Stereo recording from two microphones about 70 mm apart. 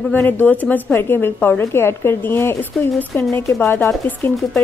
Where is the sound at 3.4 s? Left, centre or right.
Left.